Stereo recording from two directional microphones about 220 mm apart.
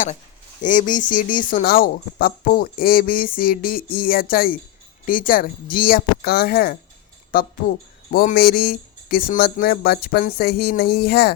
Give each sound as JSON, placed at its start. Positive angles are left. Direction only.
{"t": 0.6, "sound": "speech", "side_deg": 35}